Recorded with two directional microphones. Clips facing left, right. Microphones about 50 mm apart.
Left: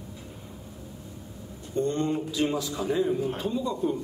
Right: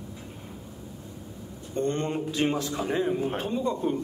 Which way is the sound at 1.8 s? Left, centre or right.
Right.